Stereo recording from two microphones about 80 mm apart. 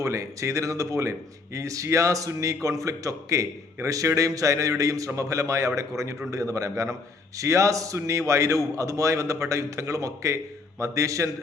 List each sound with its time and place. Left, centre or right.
0.0 s a man's voice: right